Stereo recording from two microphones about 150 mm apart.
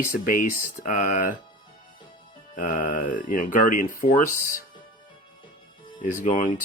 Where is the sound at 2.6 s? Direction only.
65° left (ahead or behind).